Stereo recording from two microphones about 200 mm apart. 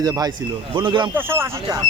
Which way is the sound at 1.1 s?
10° right (ahead or behind).